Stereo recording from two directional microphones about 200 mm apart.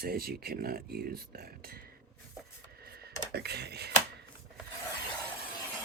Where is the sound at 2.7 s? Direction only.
50° right (ahead or behind).